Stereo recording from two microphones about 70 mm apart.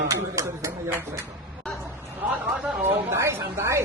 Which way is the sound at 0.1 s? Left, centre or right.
Right.